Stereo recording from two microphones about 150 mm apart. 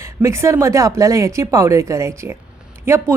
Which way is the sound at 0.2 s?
20° right (ahead or behind).